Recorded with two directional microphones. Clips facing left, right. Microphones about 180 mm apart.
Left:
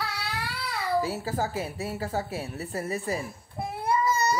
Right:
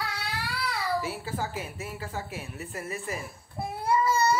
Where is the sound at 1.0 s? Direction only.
40° left (ahead or behind).